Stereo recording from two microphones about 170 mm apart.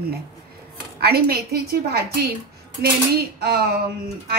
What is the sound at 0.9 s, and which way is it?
A woman's voice, 70° right (ahead or behind).